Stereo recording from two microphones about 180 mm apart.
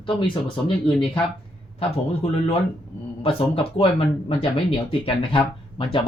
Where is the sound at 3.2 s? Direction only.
30° left (ahead or behind).